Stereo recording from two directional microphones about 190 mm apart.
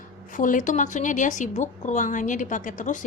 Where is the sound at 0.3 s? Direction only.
45° left (ahead or behind).